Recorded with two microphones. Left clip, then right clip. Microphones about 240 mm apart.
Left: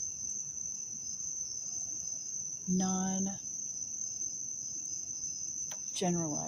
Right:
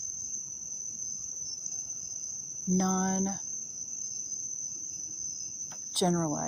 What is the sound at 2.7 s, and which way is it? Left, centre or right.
Cricket, right.